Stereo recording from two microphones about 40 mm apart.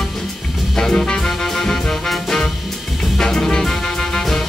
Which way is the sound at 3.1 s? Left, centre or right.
Centre.